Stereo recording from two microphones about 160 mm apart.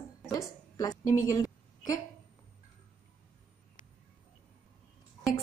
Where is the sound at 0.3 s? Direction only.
20° left (ahead or behind).